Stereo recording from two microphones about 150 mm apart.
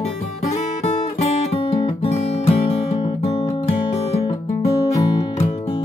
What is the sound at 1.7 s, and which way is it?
Music, 45° left (ahead or behind).